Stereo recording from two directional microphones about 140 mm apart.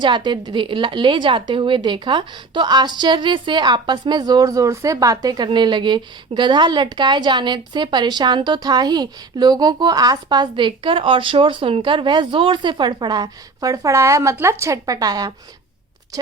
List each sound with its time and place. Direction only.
0.0 s a woman's voice: 35° right (ahead or behind)